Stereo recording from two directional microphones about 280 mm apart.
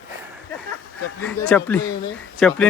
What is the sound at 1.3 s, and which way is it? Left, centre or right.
A man's voice, centre.